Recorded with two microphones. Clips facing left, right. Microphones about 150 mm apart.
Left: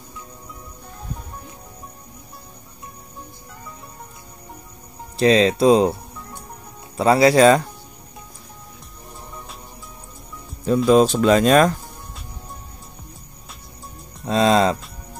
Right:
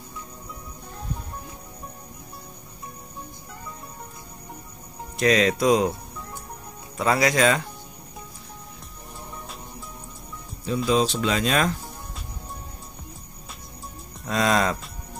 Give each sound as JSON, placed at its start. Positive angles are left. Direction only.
{"t": 5.1, "sound": "speech", "side_deg": 30}
{"t": 7.0, "sound": "speech", "side_deg": 30}
{"t": 10.9, "sound": "speech", "side_deg": 50}
{"t": 14.2, "sound": "speech", "side_deg": 25}